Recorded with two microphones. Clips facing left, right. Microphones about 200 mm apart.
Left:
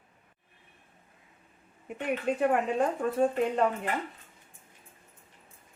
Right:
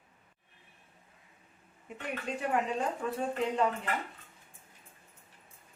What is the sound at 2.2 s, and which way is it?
Speech, 55° left (ahead or behind).